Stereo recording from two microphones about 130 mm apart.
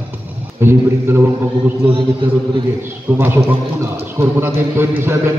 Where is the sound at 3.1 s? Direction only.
20° right (ahead or behind).